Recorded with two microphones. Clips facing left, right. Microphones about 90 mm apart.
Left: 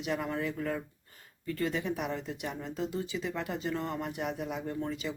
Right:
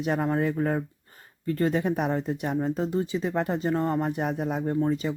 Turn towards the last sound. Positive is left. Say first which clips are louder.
# right 9 dB
turn(degrees=-35)  # may be behind; listen again after turning